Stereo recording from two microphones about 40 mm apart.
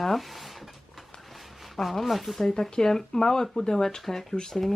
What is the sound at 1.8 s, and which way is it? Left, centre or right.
Speech, centre.